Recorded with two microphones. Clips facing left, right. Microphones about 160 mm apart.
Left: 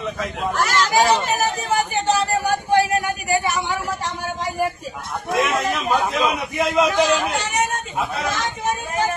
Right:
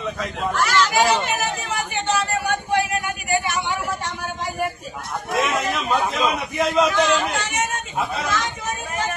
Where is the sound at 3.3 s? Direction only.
40° left (ahead or behind).